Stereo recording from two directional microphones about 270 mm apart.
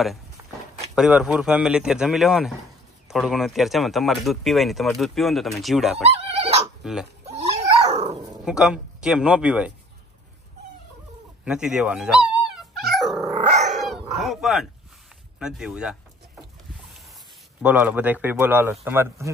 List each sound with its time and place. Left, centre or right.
0.9 s speech: centre
6.0 s dog: right
6.8 s speech: centre
7.2 s dog: right
8.5 s speech: centre
11.4 s speech: centre
12.8 s dog: centre
13.2 s dog: right
14.1 s speech: centre
17.6 s speech: centre